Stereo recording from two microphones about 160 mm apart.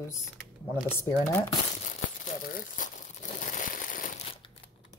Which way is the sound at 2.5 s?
55° left (ahead or behind).